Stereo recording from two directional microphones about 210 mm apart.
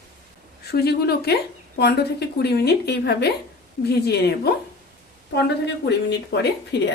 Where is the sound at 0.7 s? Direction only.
50° left (ahead or behind).